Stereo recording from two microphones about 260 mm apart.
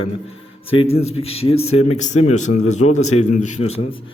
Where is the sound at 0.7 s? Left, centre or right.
Left.